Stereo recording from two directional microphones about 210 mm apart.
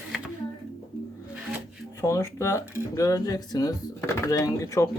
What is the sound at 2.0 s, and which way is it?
Speech, 15° left (ahead or behind).